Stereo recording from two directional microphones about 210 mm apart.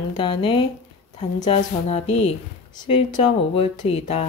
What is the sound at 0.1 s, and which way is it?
Speech, 25° left (ahead or behind).